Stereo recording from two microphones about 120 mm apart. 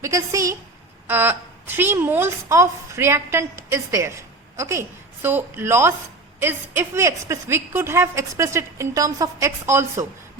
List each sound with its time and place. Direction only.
0.0 s a woman's voice: 25° right (ahead or behind)